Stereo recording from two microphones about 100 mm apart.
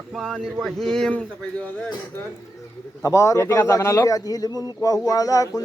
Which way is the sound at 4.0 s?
40° left (ahead or behind).